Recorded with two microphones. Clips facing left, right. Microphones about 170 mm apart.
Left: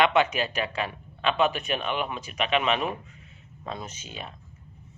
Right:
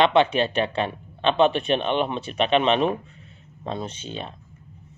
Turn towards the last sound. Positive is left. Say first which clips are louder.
# right 7 dB
turn(degrees=-30)  # may be behind; listen again after turning